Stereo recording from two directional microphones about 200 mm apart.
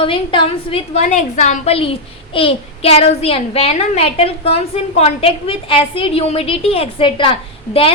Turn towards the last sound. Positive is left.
turn(degrees=25)  # may be behind; listen again after turning